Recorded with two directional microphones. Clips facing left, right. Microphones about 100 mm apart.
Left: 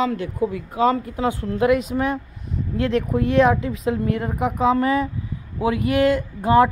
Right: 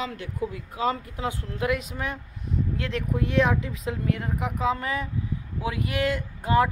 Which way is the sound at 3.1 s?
55° left (ahead or behind).